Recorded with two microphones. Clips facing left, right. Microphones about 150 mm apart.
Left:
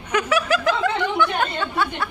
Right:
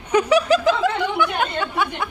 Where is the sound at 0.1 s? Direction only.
30° right (ahead or behind).